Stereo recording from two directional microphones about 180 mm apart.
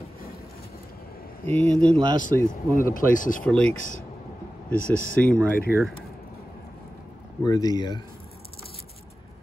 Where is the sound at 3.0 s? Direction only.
50° left (ahead or behind).